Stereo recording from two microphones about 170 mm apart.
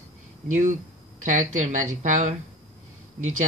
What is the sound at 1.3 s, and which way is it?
Speech, 45° right (ahead or behind).